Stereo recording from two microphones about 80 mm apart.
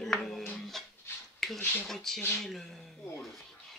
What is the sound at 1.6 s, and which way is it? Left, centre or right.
Speech, left.